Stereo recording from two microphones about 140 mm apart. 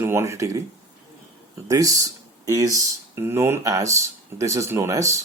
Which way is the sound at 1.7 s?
25° right (ahead or behind).